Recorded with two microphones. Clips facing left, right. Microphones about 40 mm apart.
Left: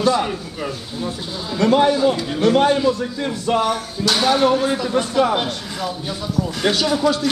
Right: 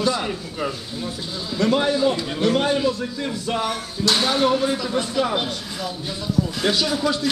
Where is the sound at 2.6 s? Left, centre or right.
Left.